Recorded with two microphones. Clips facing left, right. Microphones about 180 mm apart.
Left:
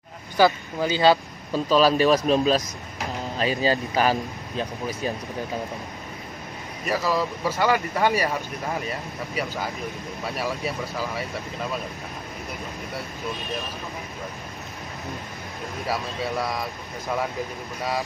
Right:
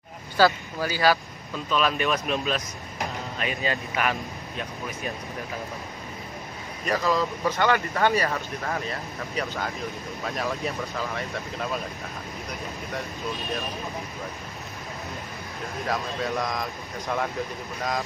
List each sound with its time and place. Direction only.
0.4 s speech: 20° left (ahead or behind)
6.9 s speech: 10° left (ahead or behind)
15.9 s speech: 5° left (ahead or behind)